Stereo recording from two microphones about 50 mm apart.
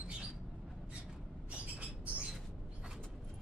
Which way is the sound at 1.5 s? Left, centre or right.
Right.